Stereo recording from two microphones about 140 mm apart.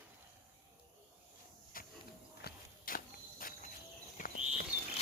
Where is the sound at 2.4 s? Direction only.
90° left.